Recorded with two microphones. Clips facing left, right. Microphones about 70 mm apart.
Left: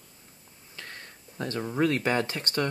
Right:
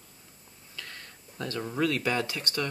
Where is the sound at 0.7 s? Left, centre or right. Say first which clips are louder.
Left 1 dB; left.